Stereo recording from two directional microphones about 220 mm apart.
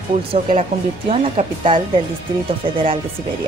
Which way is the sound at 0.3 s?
25° right (ahead or behind).